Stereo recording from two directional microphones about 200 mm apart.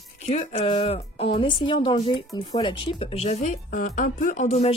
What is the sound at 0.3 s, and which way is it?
Speech, 35° left (ahead or behind).